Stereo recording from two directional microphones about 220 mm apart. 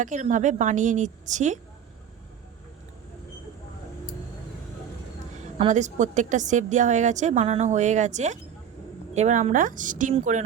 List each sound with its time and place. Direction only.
0.0 s a woman's voice: 35° right (ahead or behind)
5.5 s a woman's voice: 30° right (ahead or behind)